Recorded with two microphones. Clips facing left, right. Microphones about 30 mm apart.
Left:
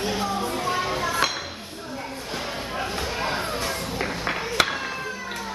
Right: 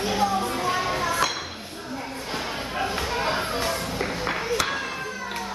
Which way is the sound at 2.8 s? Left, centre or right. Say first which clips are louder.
Right 2 dB; centre.